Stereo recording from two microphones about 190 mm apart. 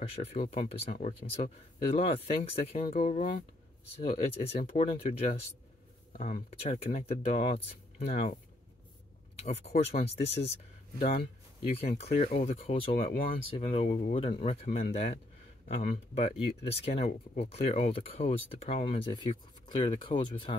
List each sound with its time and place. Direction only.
0.0 s speech: 30° left (ahead or behind)
9.4 s speech: 35° left (ahead or behind)